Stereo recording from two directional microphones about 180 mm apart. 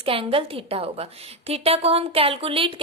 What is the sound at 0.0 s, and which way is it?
A woman's voice, 30° right (ahead or behind).